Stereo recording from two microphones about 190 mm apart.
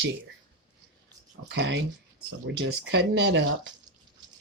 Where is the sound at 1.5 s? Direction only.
65° right (ahead or behind).